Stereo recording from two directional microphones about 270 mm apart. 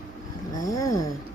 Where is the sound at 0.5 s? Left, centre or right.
Centre.